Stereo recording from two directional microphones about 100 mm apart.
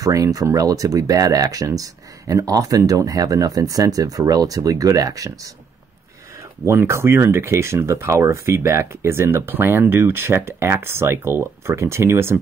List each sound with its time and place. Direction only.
0.0 s speech: 35° right (ahead or behind)
6.6 s speech: 25° right (ahead or behind)